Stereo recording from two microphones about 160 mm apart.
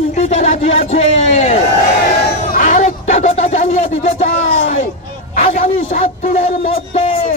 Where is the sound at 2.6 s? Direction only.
55° left (ahead or behind).